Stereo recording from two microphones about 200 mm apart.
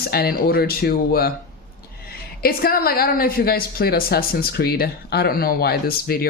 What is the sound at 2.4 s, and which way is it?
A woman's voice, 50° left (ahead or behind).